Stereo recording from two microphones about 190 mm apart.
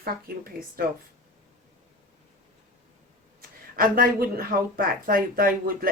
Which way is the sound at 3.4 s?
50° right (ahead or behind).